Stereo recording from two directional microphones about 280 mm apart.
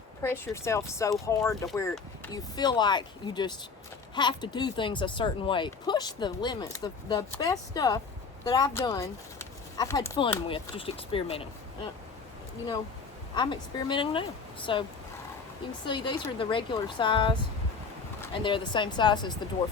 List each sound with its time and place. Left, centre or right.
0.2 s speech: centre
13.3 s speech: centre
15.9 s speech: centre